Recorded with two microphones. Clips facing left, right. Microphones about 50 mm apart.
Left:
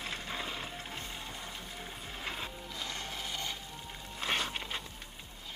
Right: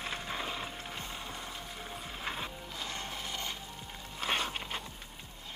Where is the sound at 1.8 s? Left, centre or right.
Centre.